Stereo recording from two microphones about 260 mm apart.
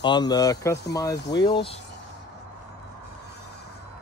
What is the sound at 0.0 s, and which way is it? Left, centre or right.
Speech, centre.